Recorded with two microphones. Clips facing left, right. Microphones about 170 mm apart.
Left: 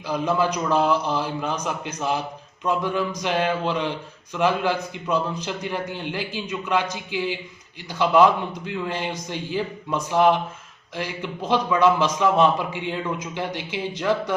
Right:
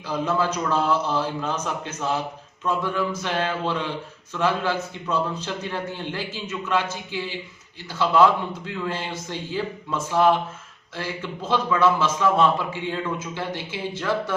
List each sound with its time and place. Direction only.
0.1 s a man's voice: 15° left (ahead or behind)